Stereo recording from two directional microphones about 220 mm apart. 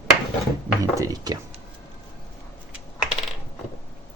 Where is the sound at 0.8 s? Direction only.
15° right (ahead or behind).